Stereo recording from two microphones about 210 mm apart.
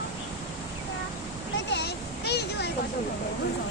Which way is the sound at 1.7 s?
50° left (ahead or behind).